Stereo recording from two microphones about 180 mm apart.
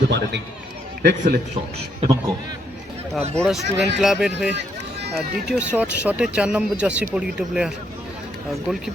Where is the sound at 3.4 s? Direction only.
Centre (ahead or behind).